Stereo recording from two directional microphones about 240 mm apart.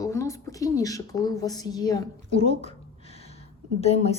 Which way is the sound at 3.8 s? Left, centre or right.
Left.